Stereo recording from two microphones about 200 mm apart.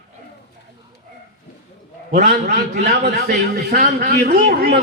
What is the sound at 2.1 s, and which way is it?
A man's voice, 50° right (ahead or behind).